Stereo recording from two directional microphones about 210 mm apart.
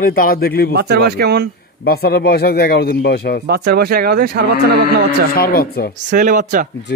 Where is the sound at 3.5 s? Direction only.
50° right (ahead or behind).